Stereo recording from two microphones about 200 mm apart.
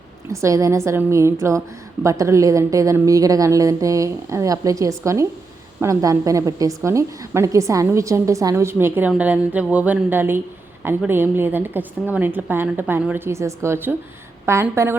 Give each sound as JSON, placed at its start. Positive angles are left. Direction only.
{"t": 0.3, "sound": "a woman's voice", "side_deg": -15}